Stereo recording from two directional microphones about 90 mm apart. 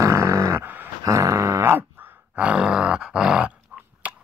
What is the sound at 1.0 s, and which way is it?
Grunt, 35° right (ahead or behind).